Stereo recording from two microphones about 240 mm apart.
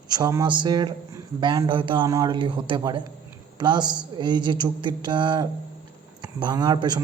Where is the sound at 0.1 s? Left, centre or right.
Centre.